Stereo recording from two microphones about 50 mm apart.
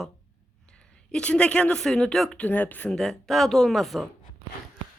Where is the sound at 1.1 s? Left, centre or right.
Left.